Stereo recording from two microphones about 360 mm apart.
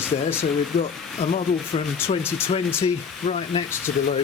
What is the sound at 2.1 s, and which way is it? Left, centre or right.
Speech, centre.